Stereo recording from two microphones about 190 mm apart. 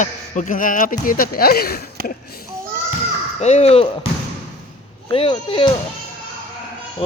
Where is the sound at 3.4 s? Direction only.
35° left (ahead or behind).